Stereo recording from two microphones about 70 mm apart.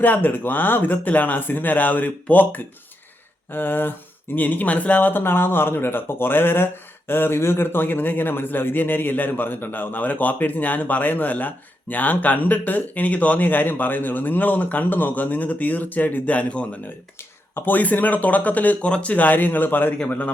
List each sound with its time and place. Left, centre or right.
0.0 s a man's voice: left
17.2 s a man's voice: left